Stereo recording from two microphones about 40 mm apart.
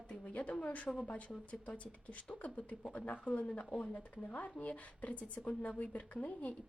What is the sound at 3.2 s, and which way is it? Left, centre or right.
A woman's voice, left.